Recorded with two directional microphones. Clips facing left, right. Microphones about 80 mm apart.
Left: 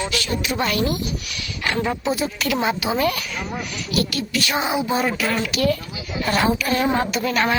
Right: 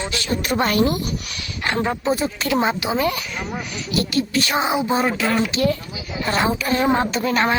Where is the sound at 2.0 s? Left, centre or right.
Right.